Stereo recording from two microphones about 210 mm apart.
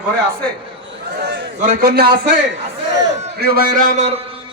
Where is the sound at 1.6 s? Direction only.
40° right (ahead or behind).